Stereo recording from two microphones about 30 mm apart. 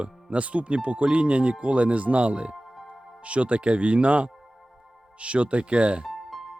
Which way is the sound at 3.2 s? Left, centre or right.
Right.